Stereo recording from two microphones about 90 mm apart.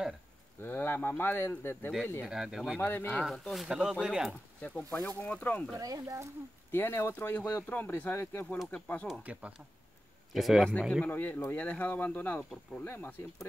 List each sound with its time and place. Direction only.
0.6 s speech: 25° left (ahead or behind)
2.2 s speech: 5° right (ahead or behind)
2.8 s speech: 25° left (ahead or behind)
3.2 s speech: 5° left (ahead or behind)
4.6 s speech: 15° left (ahead or behind)
5.8 s speech: 40° right (ahead or behind)
6.7 s speech: 25° left (ahead or behind)
9.2 s speech: 15° right (ahead or behind)
10.3 s speech: centre (ahead or behind)
11.1 s speech: 20° left (ahead or behind)